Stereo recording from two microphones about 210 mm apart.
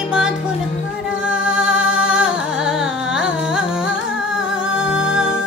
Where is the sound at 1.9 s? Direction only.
5° right (ahead or behind).